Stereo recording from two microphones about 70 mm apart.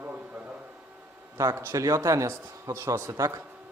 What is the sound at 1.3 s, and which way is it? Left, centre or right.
Speech, right.